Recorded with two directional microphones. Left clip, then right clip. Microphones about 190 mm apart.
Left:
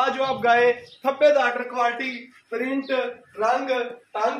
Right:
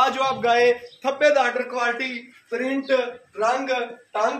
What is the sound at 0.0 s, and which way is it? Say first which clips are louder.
A man's voice: right 1 dB; 60° right (ahead or behind).